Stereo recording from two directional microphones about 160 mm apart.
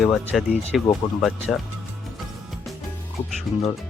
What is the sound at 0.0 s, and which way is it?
Speech, centre (ahead or behind).